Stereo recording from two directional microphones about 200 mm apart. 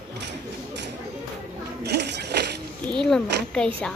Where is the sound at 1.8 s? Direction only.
55° right (ahead or behind).